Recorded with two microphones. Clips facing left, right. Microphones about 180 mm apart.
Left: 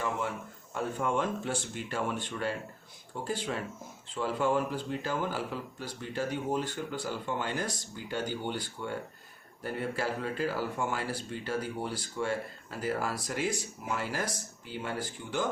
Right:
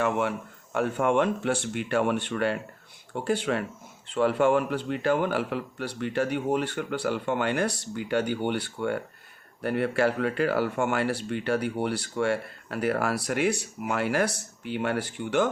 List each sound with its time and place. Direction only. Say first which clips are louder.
0.0 s speech: right 7 dB; 70° right (ahead or behind)